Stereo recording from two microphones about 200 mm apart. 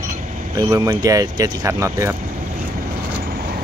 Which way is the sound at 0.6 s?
15° right (ahead or behind).